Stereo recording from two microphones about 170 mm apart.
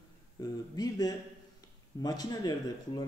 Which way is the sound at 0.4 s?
20° left (ahead or behind).